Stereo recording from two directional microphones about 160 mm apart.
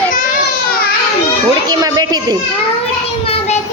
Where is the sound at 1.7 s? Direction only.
25° right (ahead or behind).